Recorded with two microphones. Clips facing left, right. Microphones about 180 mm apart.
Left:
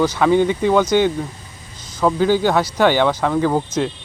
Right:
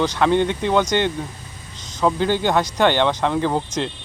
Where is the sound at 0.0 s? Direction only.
5° left (ahead or behind).